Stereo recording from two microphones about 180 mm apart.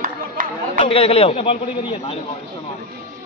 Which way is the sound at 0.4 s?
50° right (ahead or behind).